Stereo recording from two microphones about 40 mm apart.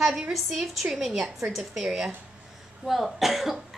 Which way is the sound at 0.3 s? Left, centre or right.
Centre.